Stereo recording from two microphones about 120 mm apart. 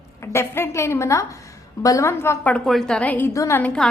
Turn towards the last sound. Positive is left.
turn(degrees=5)  # may be behind; listen again after turning